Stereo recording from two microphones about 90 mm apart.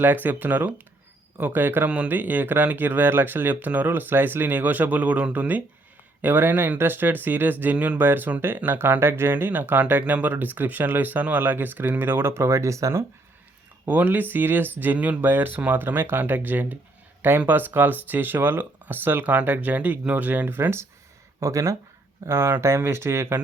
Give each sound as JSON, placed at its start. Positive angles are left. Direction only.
{"t": 0.0, "sound": "speech", "side_deg": -20}
{"t": 13.8, "sound": "speech", "side_deg": -20}